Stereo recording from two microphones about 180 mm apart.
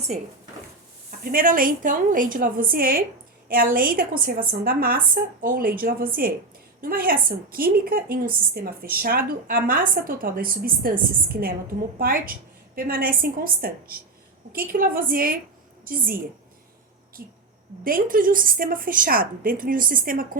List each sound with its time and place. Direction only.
1.2 s a woman's voice: 50° right (ahead or behind)